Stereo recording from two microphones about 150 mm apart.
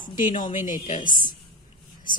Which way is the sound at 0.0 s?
60° left (ahead or behind).